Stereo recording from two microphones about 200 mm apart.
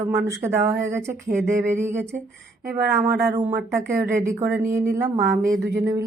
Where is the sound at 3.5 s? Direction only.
50° right (ahead or behind).